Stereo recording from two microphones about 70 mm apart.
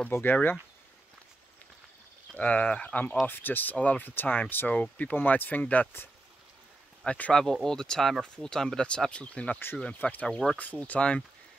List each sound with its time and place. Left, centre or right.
0.1 s speech: left
2.3 s speech: left
7.1 s speech: centre
10.2 s speech: centre
10.6 s speech: left